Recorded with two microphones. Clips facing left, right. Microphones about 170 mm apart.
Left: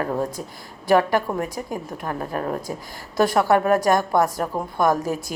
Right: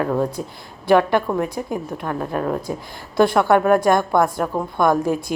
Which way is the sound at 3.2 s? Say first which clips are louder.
Right 3 dB; 40° left (ahead or behind).